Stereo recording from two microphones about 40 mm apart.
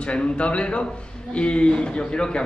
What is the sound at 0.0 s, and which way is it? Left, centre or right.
A man's voice, left.